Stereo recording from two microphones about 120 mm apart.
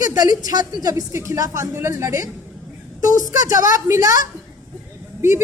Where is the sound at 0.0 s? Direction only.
30° right (ahead or behind).